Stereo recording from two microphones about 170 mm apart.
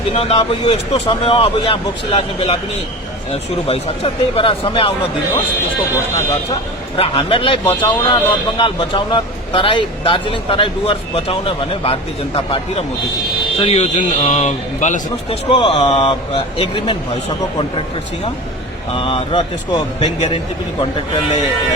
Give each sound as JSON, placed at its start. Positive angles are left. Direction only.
{"t": 0.1, "sound": "a man's voice", "side_deg": 35}
{"t": 3.7, "sound": "a man's voice", "side_deg": 35}
{"t": 7.0, "sound": "a man's voice", "side_deg": 30}
{"t": 18.9, "sound": "a man's voice", "side_deg": 30}